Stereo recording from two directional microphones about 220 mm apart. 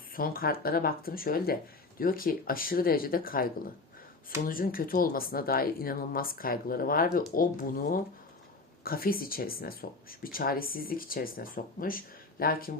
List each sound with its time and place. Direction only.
0.1 s speech: 40° left (ahead or behind)